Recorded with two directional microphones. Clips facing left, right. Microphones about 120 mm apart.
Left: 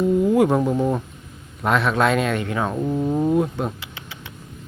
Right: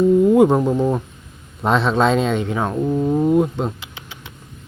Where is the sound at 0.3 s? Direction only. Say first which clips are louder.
Right 3 dB; 20° right (ahead or behind).